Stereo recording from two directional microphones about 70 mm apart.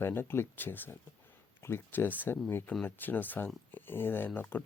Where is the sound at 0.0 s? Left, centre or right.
Left.